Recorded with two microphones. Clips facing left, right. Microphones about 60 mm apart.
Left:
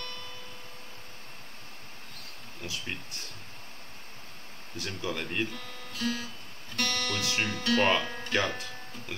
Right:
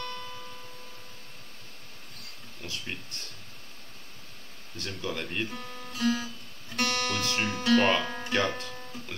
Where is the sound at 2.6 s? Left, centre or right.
Centre.